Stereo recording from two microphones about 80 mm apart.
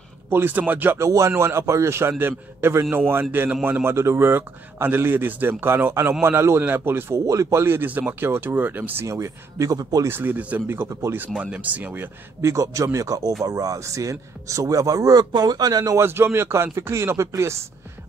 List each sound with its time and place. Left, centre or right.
0.3 s speech: right
0.9 s speech: right
7.2 s speech: right
9.0 s speech: right
10.0 s speech: right
10.7 s speech: right
11.1 s speech: centre; by 16.0 s right
16.0 s speech: right